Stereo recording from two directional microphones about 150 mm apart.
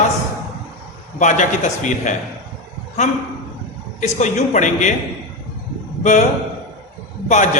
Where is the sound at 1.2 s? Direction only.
55° left (ahead or behind).